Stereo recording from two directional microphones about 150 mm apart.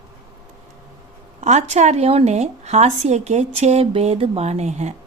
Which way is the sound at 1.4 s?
50° right (ahead or behind).